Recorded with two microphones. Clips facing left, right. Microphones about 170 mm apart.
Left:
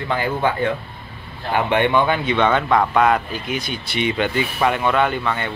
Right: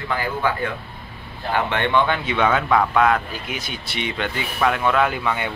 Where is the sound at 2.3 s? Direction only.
5° right (ahead or behind).